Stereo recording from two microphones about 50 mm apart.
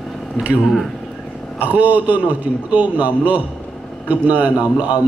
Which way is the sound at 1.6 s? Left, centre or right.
Right.